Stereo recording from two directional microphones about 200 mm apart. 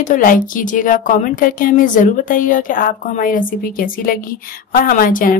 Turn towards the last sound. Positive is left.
turn(degrees=45)  # may be behind; listen again after turning